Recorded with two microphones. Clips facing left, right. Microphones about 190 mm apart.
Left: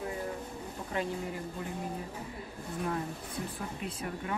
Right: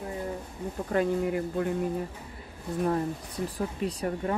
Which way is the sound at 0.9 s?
60° right (ahead or behind).